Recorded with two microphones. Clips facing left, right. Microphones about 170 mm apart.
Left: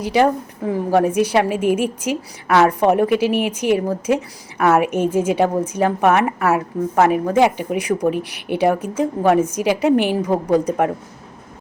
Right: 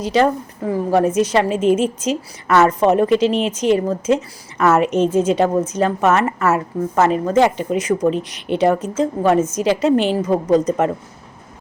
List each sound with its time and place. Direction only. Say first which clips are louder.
0.0 s a woman's voice: even; 15° left (ahead or behind)